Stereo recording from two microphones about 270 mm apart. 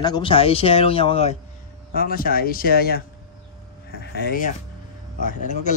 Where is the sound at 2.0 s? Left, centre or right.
Left.